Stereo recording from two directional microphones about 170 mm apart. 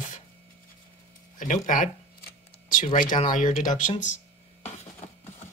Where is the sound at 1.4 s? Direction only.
50° left (ahead or behind).